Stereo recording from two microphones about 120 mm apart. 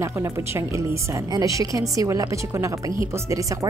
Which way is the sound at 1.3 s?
25° right (ahead or behind).